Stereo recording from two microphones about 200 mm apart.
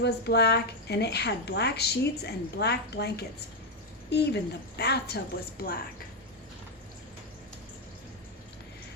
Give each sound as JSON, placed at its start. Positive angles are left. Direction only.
{"t": 0.0, "sound": "a woman's voice", "side_deg": 55}